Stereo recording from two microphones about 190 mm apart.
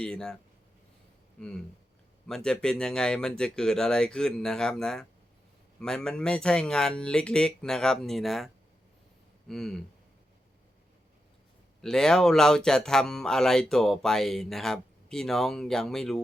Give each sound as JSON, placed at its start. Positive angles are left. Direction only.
{"t": 0.0, "sound": "speech", "side_deg": 5}
{"t": 2.2, "sound": "speech", "side_deg": 5}
{"t": 9.5, "sound": "speech", "side_deg": 0}
{"t": 11.8, "sound": "speech", "side_deg": 5}